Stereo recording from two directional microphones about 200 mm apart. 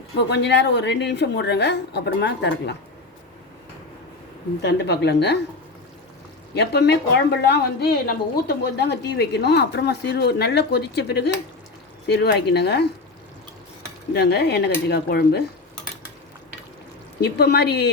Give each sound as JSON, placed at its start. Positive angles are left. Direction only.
{"t": 0.2, "sound": "speech", "side_deg": 60}
{"t": 4.6, "sound": "speech", "side_deg": 55}
{"t": 6.5, "sound": "speech", "side_deg": 55}
{"t": 14.1, "sound": "speech", "side_deg": 55}
{"t": 17.2, "sound": "speech", "side_deg": 55}